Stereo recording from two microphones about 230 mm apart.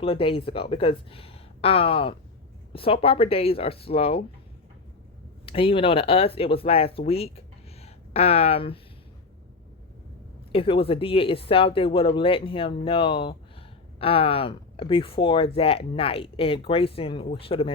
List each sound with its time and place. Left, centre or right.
0.0 s speech: left
5.5 s speech: left
10.5 s speech: left